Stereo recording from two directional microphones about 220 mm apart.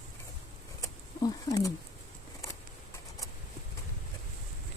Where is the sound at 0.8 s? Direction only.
15° left (ahead or behind).